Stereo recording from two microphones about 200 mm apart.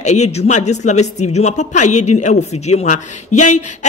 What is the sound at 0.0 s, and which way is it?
Speech, 35° left (ahead or behind).